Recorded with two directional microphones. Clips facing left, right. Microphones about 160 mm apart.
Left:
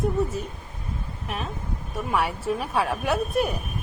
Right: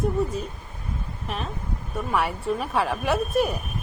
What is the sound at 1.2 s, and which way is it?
A woman's voice, centre (ahead or behind).